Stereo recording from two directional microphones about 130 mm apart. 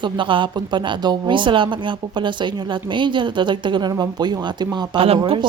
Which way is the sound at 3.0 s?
40° right (ahead or behind).